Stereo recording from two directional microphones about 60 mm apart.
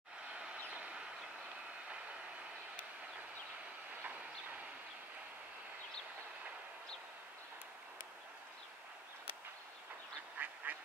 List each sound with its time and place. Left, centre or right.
0.3 s vehicle: centre
4.0 s train: right
10.4 s duck: right